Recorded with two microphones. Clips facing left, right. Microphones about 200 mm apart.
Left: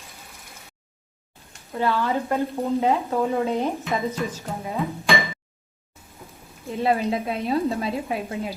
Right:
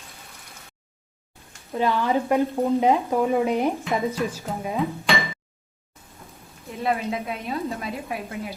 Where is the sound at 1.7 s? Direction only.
15° right (ahead or behind).